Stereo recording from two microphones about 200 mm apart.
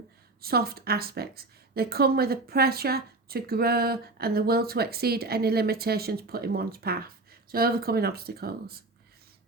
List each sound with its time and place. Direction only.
0.4 s speech: 50° right (ahead or behind)